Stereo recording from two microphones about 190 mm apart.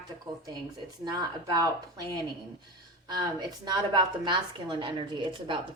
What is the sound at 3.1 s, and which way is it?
A woman's voice, 20° right (ahead or behind).